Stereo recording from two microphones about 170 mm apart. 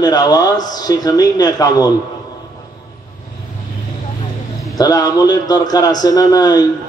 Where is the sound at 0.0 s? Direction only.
25° left (ahead or behind).